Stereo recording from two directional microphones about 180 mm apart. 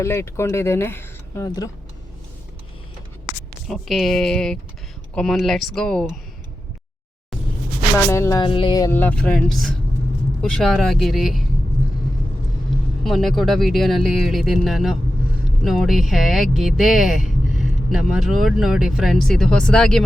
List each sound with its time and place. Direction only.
0.0 s speech: 15° left (ahead or behind)
3.7 s speech: centre (ahead or behind)
8.1 s speech: 15° left (ahead or behind)
8.4 s speech: 30° left (ahead or behind); by 11.4 s centre (ahead or behind)
12.7 s vehicle: centre (ahead or behind)
13.1 s speech: centre (ahead or behind)